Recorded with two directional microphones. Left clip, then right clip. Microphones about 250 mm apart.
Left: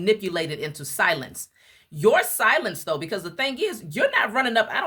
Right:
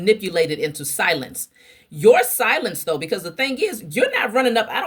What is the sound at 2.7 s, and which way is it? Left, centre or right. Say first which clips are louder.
Speech: right 4 dB; left.